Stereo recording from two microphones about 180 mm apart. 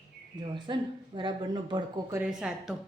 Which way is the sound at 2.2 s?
5° right (ahead or behind).